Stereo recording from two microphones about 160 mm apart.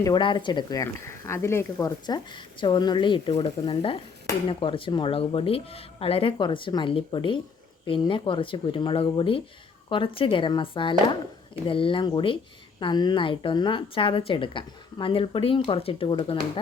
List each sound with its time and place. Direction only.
0.0 s a woman's voice: 30° left (ahead or behind)